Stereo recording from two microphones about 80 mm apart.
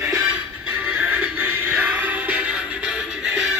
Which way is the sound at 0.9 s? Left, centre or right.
Centre.